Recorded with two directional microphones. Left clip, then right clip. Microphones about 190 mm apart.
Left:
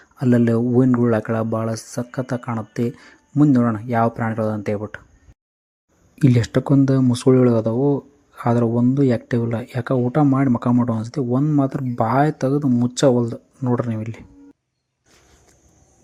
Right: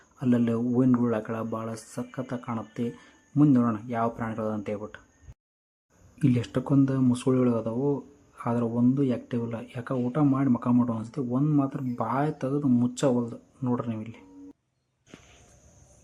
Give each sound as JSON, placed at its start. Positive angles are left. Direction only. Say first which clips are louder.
{"t": 0.2, "sound": "speech", "louder": "left 8 dB", "side_deg": 30}
{"t": 6.1, "sound": "speech", "louder": "left 8 dB", "side_deg": 30}